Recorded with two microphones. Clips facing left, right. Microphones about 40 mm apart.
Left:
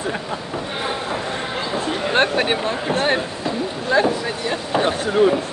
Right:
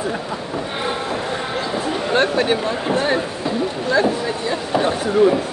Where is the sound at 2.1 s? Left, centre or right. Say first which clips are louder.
Right 1 dB; left.